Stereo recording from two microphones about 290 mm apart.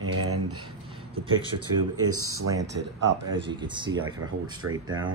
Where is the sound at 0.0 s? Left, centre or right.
Right.